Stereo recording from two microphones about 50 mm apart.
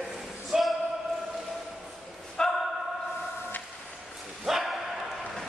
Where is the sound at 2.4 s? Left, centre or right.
Centre.